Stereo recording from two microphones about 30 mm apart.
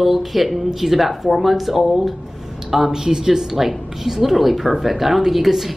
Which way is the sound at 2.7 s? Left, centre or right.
Centre.